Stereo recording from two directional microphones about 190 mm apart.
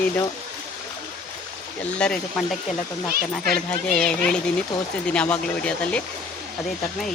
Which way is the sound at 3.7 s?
5° left (ahead or behind).